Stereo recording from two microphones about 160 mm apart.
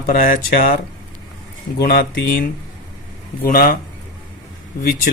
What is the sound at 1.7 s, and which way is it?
Speech, 70° left (ahead or behind).